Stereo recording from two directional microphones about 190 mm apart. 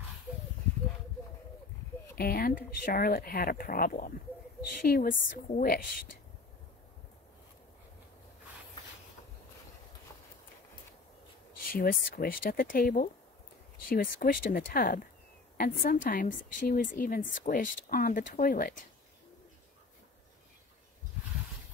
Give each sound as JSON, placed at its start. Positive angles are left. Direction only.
{"t": 2.1, "sound": "speech", "side_deg": 50}
{"t": 11.5, "sound": "speech", "side_deg": 50}